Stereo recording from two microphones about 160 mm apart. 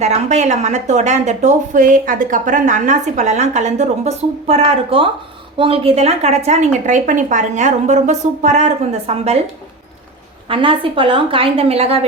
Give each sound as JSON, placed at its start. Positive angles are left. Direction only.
{"t": 0.0, "sound": "speech", "side_deg": -45}
{"t": 10.5, "sound": "a woman's voice", "side_deg": -30}